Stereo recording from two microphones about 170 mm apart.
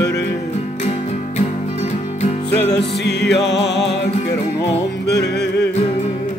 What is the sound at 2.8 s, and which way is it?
Music, 80° left.